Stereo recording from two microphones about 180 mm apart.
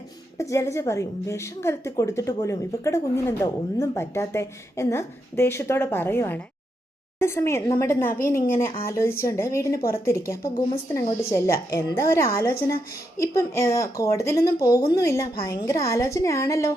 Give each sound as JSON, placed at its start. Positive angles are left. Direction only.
{"t": 0.3, "sound": "a woman's voice", "side_deg": 15}